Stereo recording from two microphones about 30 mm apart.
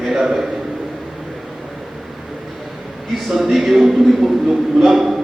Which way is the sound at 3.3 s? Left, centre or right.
Centre.